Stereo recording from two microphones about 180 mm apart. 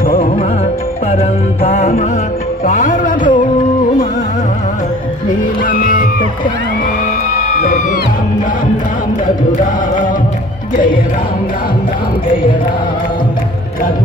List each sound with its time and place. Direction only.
0.0 s music: 55° left (ahead or behind)
1.6 s music: 35° left (ahead or behind)
2.6 s a sound: 40° left (ahead or behind)
5.3 s music: 50° left (ahead or behind)